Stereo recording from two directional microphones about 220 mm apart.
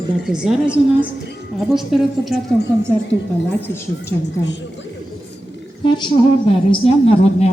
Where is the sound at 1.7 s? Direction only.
Centre (ahead or behind).